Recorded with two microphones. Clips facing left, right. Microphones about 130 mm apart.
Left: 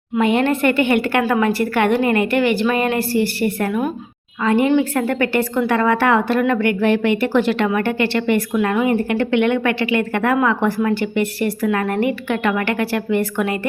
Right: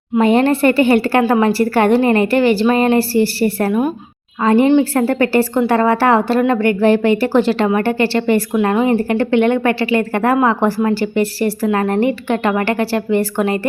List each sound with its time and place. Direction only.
0.2 s a woman's voice: 35° right (ahead or behind)